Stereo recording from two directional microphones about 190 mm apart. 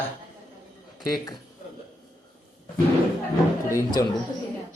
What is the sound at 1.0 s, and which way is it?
Speech, 20° left (ahead or behind).